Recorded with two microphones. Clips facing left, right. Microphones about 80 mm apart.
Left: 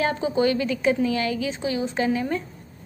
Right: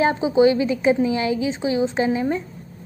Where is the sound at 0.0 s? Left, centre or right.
Centre.